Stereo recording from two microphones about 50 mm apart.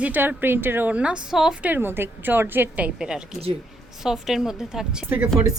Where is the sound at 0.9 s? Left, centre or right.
Right.